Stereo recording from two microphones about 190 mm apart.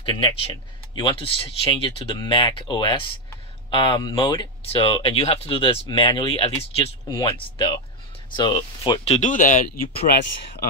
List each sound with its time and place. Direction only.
0.0 s speech: 25° left (ahead or behind); by 10.1 s 50° left (ahead or behind)